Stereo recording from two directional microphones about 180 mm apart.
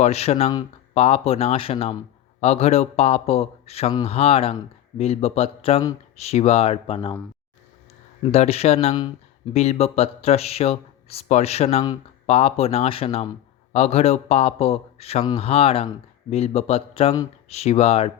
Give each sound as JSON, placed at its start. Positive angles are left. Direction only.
{"t": 0.0, "sound": "speech", "side_deg": 35}
{"t": 8.2, "sound": "speech", "side_deg": 35}